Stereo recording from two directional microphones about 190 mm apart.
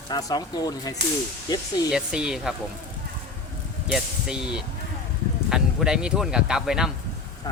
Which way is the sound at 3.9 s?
5° right (ahead or behind).